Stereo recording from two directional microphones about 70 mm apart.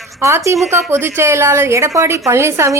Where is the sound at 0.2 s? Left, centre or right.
Right.